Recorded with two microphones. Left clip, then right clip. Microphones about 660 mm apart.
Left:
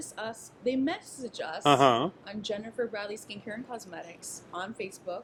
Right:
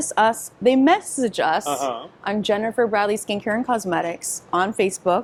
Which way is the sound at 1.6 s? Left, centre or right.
Left.